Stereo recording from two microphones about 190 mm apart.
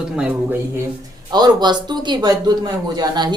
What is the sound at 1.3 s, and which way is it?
Speech, 20° right (ahead or behind).